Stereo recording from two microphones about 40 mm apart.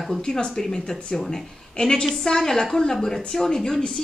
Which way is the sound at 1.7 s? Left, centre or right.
Left.